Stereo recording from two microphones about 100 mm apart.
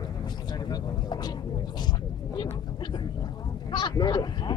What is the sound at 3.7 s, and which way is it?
Speech, 50° left (ahead or behind).